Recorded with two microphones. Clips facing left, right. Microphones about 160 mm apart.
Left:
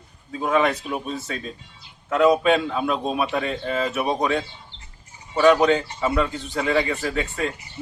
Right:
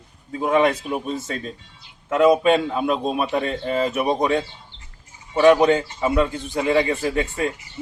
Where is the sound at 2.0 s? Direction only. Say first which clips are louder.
Right 2 dB; 5° right (ahead or behind).